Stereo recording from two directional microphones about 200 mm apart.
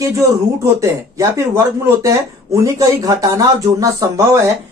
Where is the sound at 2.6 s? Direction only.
15° right (ahead or behind).